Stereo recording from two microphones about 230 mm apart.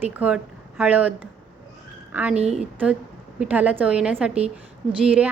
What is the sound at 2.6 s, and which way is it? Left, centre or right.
A woman's voice, centre.